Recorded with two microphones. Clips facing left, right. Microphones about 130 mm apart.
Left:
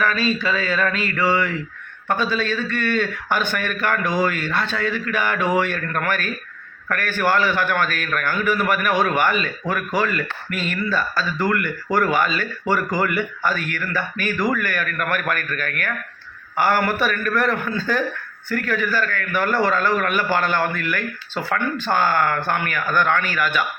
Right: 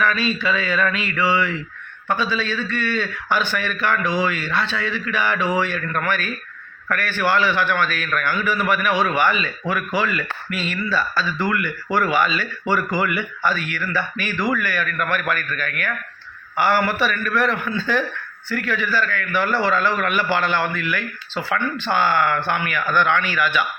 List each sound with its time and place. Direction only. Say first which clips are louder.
0.0 s mantra: even; 40° left (ahead or behind)
2.0 s a man's voice: left 1 dB; 50° left (ahead or behind)